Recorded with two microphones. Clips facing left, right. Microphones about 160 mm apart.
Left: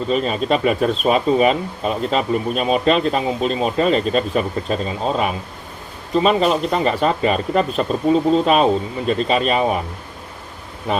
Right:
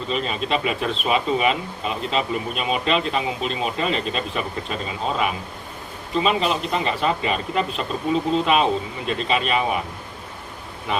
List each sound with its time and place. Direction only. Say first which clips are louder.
0.1 s speech: left 5 dB; 40° left (ahead or behind)
10.9 s speech: left 4 dB; 40° left (ahead or behind)